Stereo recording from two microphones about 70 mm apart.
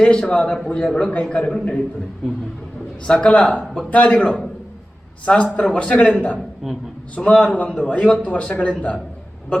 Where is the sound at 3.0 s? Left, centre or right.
Centre.